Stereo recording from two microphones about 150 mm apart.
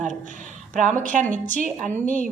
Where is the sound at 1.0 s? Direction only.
60° right (ahead or behind).